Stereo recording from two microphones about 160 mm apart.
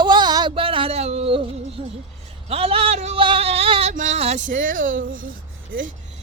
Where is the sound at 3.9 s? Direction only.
45° right (ahead or behind).